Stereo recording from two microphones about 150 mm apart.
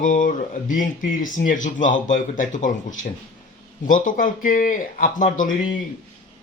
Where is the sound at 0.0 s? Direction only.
60° left (ahead or behind).